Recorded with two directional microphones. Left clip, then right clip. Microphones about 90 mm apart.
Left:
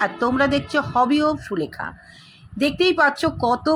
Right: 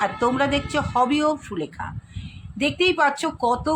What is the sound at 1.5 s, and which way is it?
Speech, 35° left (ahead or behind).